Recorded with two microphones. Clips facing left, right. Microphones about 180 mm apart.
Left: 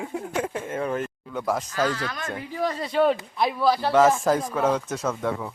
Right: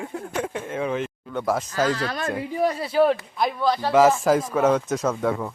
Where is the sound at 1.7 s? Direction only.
40° right (ahead or behind).